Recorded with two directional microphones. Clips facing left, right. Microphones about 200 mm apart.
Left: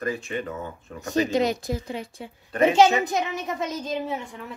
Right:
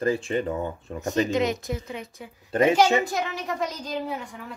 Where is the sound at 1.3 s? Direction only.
35° left (ahead or behind).